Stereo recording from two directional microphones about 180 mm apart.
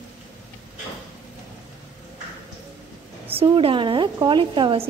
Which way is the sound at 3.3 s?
30° right (ahead or behind).